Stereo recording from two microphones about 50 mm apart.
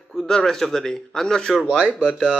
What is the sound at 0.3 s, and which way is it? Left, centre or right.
Speech, centre.